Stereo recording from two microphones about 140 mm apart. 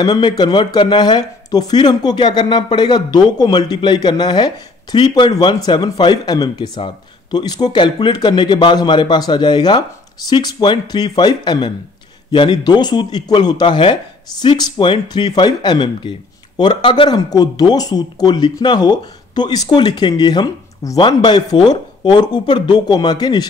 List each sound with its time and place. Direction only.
0.0 s speech: 30° left (ahead or behind)